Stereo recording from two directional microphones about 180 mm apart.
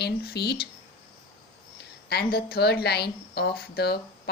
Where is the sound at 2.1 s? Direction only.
60° left (ahead or behind).